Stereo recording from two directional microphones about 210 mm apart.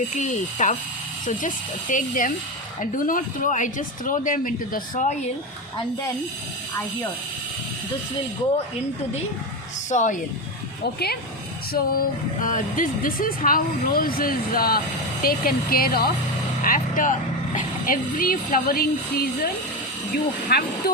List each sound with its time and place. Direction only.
0.2 s speech: 35° left (ahead or behind)
1.9 s speech: 40° left (ahead or behind)
9.9 s speech: 35° left (ahead or behind)
11.7 s speech: 40° left (ahead or behind)
20.5 s speech: 45° left (ahead or behind)